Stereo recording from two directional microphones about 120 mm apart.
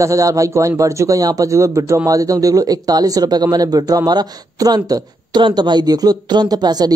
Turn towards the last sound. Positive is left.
turn(degrees=-35)  # may be behind; listen again after turning